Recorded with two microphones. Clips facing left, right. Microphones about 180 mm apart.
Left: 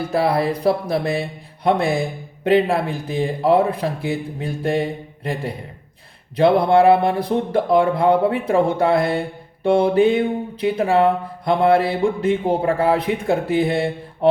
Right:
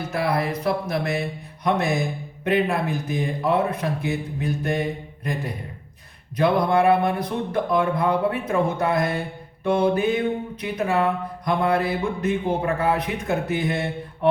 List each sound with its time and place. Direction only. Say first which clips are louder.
0.1 s speech: left 5 dB; 30° left (ahead or behind)